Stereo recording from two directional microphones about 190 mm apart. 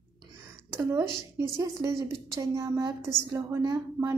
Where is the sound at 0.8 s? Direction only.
15° right (ahead or behind).